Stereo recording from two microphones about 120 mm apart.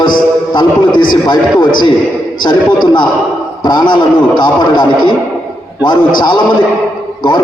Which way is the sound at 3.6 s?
40° left (ahead or behind).